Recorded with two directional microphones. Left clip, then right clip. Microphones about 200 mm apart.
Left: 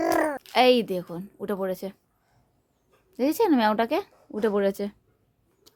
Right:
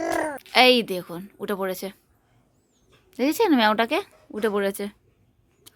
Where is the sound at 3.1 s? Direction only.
Centre (ahead or behind).